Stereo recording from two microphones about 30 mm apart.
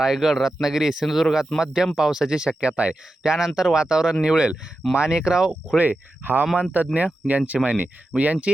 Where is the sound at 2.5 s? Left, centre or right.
Right.